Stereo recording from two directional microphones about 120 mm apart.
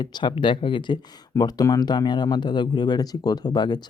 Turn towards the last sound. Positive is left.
turn(degrees=35)  # may be behind; listen again after turning